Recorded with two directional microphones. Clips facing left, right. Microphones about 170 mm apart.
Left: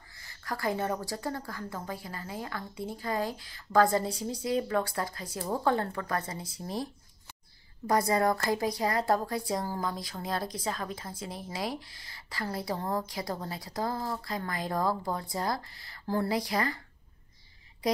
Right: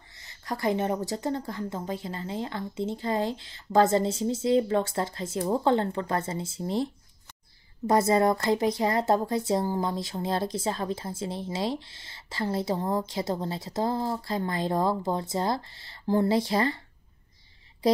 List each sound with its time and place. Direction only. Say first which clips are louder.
0.1 s speech: right 3 dB; 20° right (ahead or behind)